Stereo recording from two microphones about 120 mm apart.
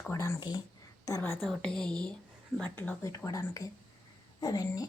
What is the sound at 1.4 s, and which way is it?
Speech, 5° left (ahead or behind).